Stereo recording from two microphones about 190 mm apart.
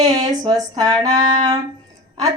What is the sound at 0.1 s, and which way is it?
Speech, 20° right (ahead or behind).